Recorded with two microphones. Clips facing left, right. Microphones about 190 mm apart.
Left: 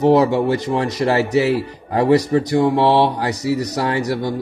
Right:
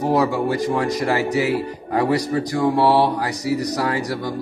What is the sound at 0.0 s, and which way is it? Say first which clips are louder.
Speech: left 5 dB; 25° left (ahead or behind).